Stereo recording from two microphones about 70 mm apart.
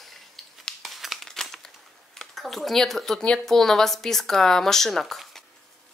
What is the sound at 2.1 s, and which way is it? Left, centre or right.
Speech, centre.